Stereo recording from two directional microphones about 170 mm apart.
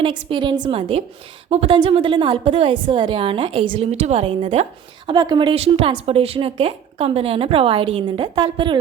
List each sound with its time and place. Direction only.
0.0 s a woman's voice: 30° right (ahead or behind)